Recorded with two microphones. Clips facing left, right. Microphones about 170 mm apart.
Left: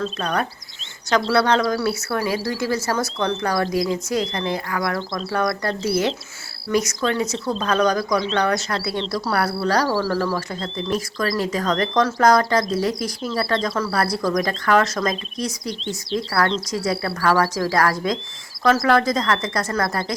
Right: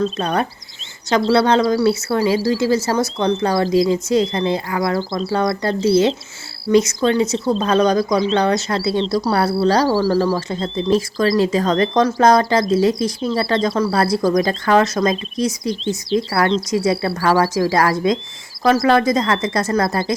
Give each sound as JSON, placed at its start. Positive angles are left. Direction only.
{"t": 0.0, "sound": "speech", "side_deg": -30}
{"t": 15.7, "sound": "speech", "side_deg": 0}
{"t": 16.8, "sound": "speech", "side_deg": -25}